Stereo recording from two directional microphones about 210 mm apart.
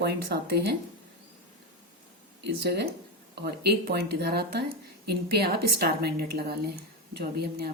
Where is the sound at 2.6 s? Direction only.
50° right (ahead or behind).